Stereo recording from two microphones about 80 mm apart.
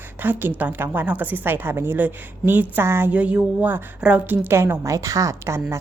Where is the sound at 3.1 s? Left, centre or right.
Centre.